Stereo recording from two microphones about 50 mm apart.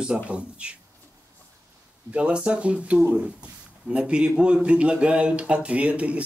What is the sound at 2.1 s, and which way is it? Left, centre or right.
Speech, right.